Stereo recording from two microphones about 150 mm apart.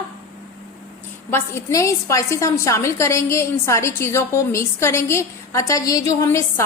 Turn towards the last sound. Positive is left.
turn(degrees=20)  # may be behind; listen again after turning